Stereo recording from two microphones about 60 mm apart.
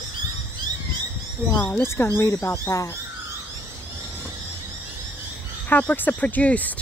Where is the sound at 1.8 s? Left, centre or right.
Left.